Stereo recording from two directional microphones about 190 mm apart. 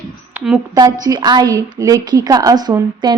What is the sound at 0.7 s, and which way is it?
Speech, 20° right (ahead or behind).